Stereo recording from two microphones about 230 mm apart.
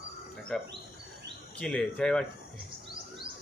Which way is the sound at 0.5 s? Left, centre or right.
Centre.